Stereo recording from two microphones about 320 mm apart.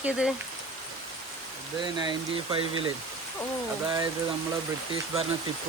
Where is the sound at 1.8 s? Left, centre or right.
Centre.